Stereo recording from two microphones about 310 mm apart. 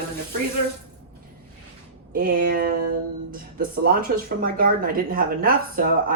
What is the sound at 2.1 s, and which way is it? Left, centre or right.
Speech, right.